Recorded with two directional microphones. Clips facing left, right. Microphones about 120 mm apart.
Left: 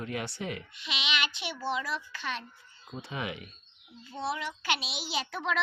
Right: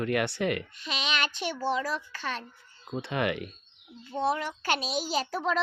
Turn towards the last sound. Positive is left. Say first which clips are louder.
# right 4 dB
turn(degrees=-35)  # may be behind; listen again after turning